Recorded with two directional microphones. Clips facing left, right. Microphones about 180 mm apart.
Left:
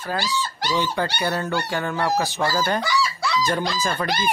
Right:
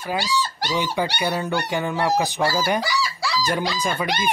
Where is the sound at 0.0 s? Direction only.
15° right (ahead or behind).